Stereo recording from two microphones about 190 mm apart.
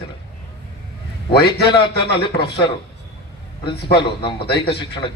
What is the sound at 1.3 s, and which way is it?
Speech, 60° left (ahead or behind).